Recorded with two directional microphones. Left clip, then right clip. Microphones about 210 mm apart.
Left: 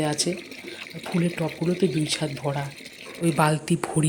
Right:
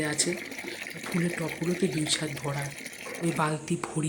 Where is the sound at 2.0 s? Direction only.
10° left (ahead or behind).